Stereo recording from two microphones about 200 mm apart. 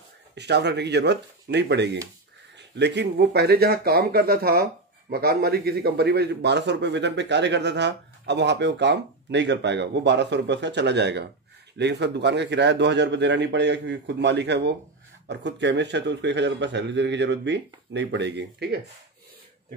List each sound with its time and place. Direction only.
0.3 s speech: 60° right (ahead or behind)